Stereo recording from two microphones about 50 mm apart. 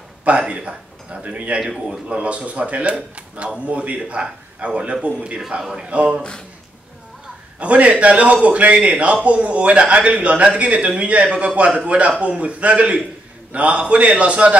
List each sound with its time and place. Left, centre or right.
0.2 s speech: right
1.6 s a man's voice: centre
2.0 s a man's voice: right
5.6 s a man's voice: centre
5.9 s a man's voice: right
7.5 s a man's voice: right